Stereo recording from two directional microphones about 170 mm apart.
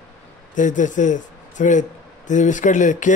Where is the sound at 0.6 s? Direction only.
50° left (ahead or behind).